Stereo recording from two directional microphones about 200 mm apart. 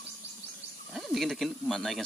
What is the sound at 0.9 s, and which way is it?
Speech, centre (ahead or behind).